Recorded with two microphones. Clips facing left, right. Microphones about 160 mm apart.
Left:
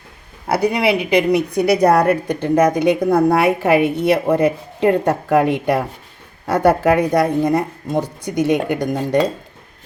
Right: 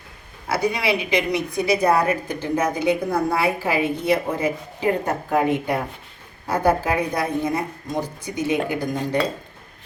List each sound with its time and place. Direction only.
0.4 s a woman's voice: 60° left (ahead or behind)